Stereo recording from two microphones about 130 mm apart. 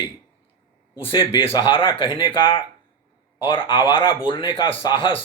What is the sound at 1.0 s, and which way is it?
Speech, 40° left (ahead or behind).